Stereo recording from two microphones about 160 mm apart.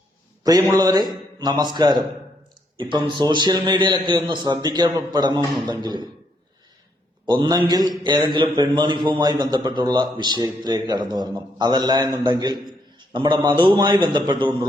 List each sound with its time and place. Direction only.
0.6 s a man's voice: 20° right (ahead or behind)
7.3 s a man's voice: 30° right (ahead or behind)